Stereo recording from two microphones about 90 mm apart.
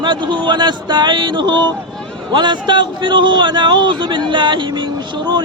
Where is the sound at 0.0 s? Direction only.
60° right (ahead or behind).